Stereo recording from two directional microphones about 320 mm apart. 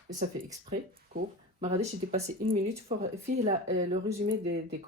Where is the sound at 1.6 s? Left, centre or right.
Right.